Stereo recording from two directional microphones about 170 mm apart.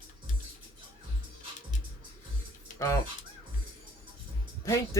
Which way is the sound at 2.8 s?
20° left (ahead or behind).